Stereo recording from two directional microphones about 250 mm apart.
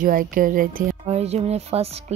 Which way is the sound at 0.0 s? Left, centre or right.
Right.